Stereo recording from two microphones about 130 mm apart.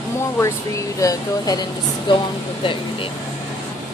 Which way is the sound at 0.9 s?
30° left (ahead or behind).